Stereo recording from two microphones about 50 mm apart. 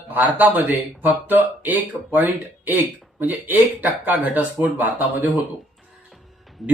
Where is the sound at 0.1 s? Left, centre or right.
Right.